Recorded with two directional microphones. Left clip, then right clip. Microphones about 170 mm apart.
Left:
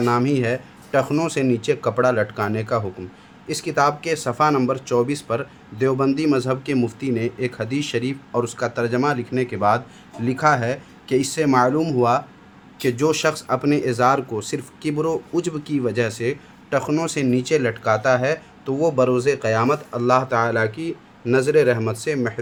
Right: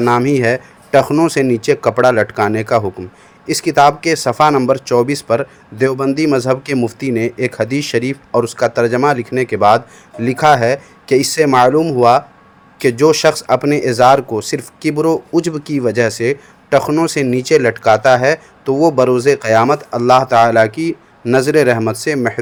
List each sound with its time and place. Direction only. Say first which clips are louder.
0.0 s speech: right 7 dB; 30° right (ahead or behind)